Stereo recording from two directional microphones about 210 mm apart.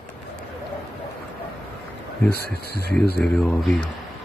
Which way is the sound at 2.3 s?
45° right (ahead or behind).